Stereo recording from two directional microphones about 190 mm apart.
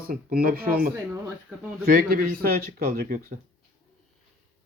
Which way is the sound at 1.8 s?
50° right (ahead or behind).